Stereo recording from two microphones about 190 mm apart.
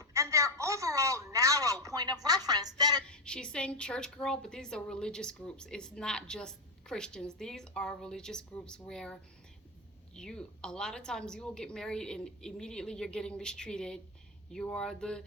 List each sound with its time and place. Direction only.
0.0 s a woman's voice: 15° right (ahead or behind)
3.1 s a woman's voice: 5° left (ahead or behind)
10.2 s a woman's voice: 5° left (ahead or behind)